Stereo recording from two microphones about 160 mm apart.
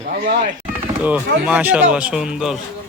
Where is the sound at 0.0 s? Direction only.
65° right (ahead or behind).